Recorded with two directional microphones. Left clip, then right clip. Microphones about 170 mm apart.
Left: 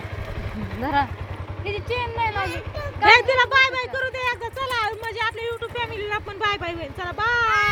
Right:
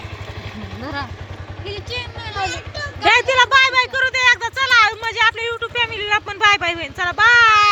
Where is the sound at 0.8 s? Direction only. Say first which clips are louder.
Left 6 dB; 50° left (ahead or behind).